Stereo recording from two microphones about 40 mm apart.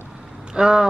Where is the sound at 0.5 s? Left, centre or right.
Centre.